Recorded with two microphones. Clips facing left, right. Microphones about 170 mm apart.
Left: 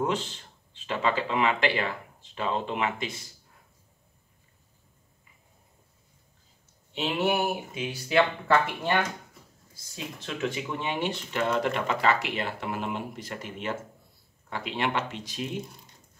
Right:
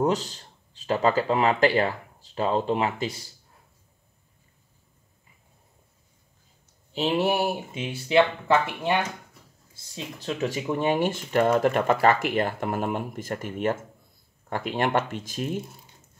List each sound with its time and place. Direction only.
0.0 s speech: 40° right (ahead or behind)
6.9 s speech: 35° right (ahead or behind)
10.1 s speech: 35° right (ahead or behind)